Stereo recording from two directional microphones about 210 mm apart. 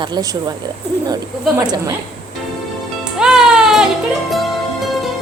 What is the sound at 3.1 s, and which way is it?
Music, 5° right (ahead or behind).